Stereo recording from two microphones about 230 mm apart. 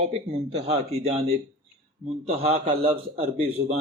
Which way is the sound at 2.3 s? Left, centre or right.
Right.